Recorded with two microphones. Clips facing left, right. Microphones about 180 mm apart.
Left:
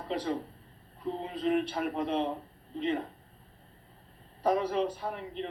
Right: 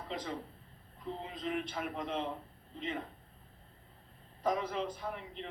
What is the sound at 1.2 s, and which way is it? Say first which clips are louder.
Speech: left 9 dB; 45° left (ahead or behind).